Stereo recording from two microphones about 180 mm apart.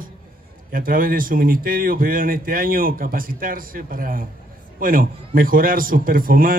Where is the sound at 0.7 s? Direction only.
50° right (ahead or behind).